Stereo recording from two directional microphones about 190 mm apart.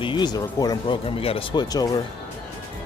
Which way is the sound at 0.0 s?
25° left (ahead or behind).